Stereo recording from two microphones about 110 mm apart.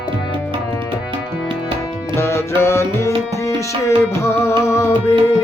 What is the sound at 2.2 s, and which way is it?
Music, 25° left (ahead or behind).